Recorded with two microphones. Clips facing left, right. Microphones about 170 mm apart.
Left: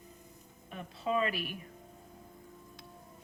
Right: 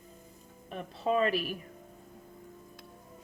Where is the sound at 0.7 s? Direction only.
45° right (ahead or behind).